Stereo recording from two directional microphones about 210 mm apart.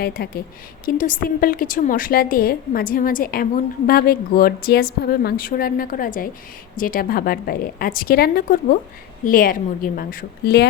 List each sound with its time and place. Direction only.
0.0 s a woman's voice: 45° left (ahead or behind)